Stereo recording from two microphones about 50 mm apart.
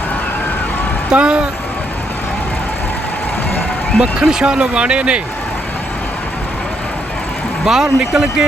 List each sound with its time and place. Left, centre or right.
1.1 s speech: centre
4.0 s speech: centre
7.6 s speech: centre